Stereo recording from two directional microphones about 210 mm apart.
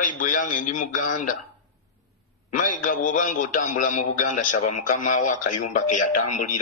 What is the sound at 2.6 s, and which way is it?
Speech, 40° left (ahead or behind).